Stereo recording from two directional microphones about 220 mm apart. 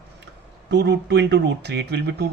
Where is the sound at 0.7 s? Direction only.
50° right (ahead or behind).